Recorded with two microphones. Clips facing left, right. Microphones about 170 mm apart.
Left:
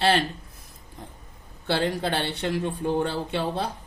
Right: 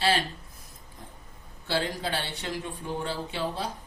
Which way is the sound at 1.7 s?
60° left (ahead or behind).